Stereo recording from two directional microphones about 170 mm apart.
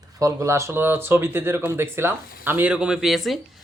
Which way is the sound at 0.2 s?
15° right (ahead or behind).